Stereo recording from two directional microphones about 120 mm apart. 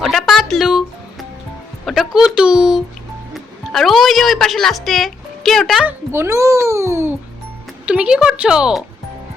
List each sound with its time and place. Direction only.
0.0 s music: centre (ahead or behind)
1.8 s a sound: centre (ahead or behind)
3.3 s music: centre (ahead or behind)
5.8 s a child's voice: 20° right (ahead or behind)
7.9 s speech: 5° right (ahead or behind)